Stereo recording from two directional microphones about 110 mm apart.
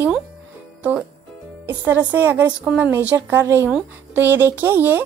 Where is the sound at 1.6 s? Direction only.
20° right (ahead or behind).